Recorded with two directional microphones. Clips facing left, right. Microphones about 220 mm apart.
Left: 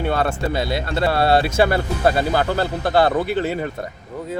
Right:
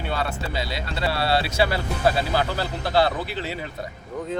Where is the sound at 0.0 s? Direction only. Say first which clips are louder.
Left 7 dB; 50° left (ahead or behind).